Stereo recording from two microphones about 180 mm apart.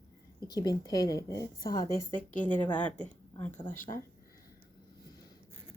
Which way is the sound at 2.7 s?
5° left (ahead or behind).